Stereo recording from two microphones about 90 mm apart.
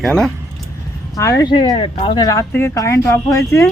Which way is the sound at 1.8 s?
70° left (ahead or behind).